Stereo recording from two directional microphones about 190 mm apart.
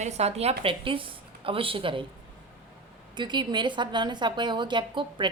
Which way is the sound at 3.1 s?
25° right (ahead or behind).